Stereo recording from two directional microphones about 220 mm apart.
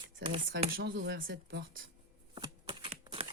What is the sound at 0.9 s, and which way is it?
Speech, 60° right (ahead or behind).